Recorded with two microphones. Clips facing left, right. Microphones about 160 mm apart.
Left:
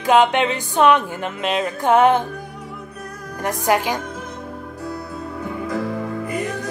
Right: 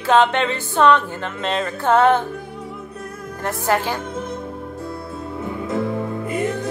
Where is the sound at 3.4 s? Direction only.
15° left (ahead or behind).